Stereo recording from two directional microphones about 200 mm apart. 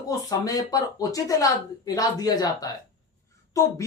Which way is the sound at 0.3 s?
20° left (ahead or behind).